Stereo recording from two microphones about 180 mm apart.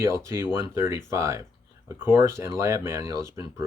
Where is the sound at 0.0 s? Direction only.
15° right (ahead or behind).